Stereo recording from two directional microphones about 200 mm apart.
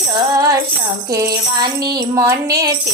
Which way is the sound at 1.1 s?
20° right (ahead or behind).